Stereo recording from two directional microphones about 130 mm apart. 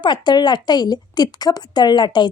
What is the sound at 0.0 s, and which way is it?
Speech, 35° left (ahead or behind).